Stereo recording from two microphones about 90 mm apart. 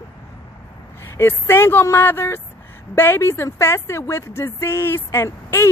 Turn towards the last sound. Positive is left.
turn(degrees=30)  # may be behind; listen again after turning